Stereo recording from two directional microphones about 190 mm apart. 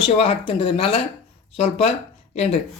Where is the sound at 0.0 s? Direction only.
30° left (ahead or behind).